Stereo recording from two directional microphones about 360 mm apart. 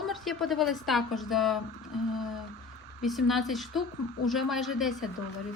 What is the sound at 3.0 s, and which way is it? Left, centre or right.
A woman's voice, centre.